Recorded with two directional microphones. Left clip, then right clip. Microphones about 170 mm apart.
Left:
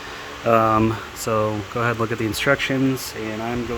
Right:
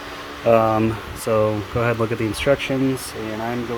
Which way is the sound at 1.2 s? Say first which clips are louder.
Right 3 dB; 10° left (ahead or behind).